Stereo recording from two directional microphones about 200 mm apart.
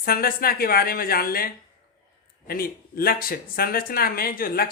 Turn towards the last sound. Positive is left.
turn(degrees=45)  # may be behind; listen again after turning